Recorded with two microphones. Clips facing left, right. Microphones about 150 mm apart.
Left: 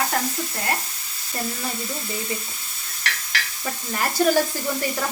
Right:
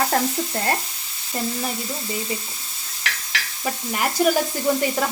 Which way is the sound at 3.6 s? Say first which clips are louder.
Right 3 dB; 15° right (ahead or behind).